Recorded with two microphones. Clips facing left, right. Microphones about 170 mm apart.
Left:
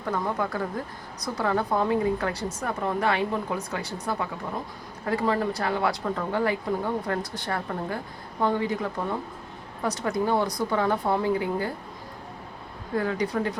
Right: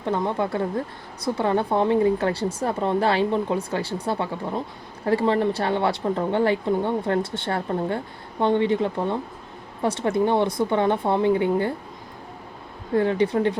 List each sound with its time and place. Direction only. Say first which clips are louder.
0.0 s speech: right 4 dB; 25° right (ahead or behind)
13.0 s speech: right 6 dB; 25° right (ahead or behind)